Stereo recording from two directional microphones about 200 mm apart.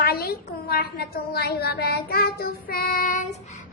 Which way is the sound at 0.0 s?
50° left (ahead or behind).